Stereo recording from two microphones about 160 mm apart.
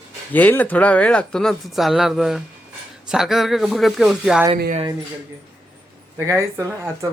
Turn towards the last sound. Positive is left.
turn(degrees=-20)  # may be behind; listen again after turning